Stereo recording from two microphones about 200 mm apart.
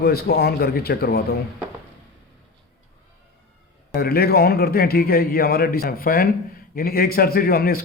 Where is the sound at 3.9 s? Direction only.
50° left (ahead or behind).